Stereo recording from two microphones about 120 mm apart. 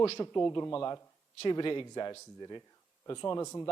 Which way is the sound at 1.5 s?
35° left (ahead or behind).